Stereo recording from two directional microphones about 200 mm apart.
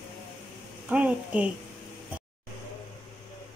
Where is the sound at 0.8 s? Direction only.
5° right (ahead or behind).